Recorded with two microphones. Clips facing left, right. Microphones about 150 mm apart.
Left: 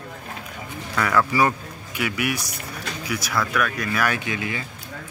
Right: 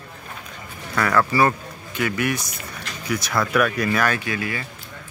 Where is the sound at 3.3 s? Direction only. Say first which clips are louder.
Right 4 dB; 10° right (ahead or behind).